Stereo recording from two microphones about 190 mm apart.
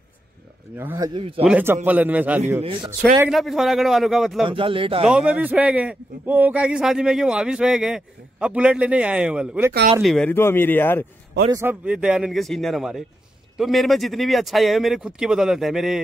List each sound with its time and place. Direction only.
0.7 s a man's voice: 15° right (ahead or behind)
2.6 s speech: 25° right (ahead or behind)
3.3 s a man's voice: centre (ahead or behind)
4.5 s speech: 25° right (ahead or behind)
5.0 s a man's voice: 5° right (ahead or behind)
10.0 s speech: 5° left (ahead or behind)
11.5 s a man's voice: 10° right (ahead or behind)